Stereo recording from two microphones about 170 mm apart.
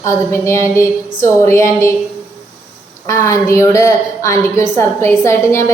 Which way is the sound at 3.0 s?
20° left (ahead or behind).